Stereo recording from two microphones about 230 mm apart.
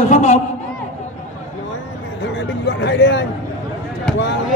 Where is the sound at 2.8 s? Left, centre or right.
Left.